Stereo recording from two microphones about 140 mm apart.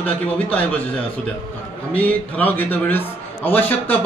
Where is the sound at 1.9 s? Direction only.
10° left (ahead or behind).